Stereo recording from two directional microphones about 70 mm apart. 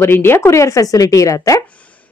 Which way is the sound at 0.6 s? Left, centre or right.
Left.